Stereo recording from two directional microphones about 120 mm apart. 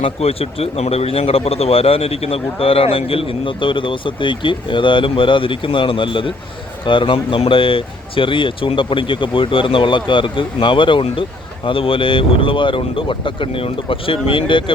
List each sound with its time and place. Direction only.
0.0 s speech: 55° left (ahead or behind)